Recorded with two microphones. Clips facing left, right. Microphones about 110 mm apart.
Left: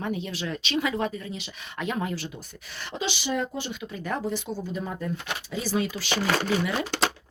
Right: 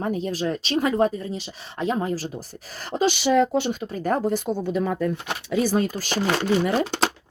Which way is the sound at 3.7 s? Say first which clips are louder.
Right 7 dB; 45° right (ahead or behind).